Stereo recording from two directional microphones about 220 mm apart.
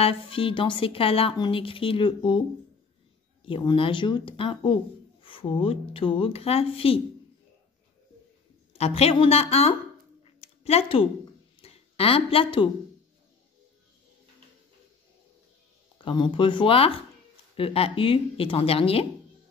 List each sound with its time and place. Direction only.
0.0 s a woman's voice: 25° left (ahead or behind)
3.4 s a woman's voice: 20° left (ahead or behind)
8.7 s a woman's voice: 30° left (ahead or behind)
10.2 s a sound: 25° left (ahead or behind)
11.6 s speech: 25° left (ahead or behind)
16.0 s a woman's voice: 20° left (ahead or behind)